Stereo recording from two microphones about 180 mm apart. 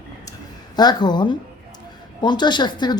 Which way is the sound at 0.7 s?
25° left (ahead or behind).